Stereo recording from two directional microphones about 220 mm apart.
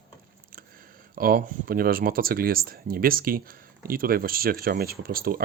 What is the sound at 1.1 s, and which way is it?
Speech, 40° right (ahead or behind).